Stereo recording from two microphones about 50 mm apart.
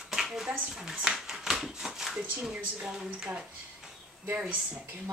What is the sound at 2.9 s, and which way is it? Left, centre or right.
Speech, centre.